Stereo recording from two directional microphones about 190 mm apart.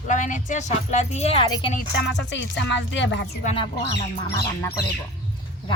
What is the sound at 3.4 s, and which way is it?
Speech, 30° left (ahead or behind).